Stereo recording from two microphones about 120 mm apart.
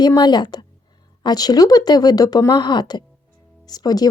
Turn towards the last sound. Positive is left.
turn(degrees=35)  # may be behind; listen again after turning